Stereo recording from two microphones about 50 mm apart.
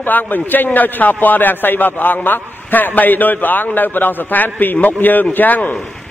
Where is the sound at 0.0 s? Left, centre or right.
Left.